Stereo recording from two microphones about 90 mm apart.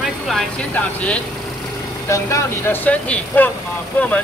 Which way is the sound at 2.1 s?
35° left (ahead or behind).